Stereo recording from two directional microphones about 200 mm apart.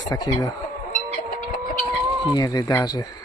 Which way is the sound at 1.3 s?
45° left (ahead or behind).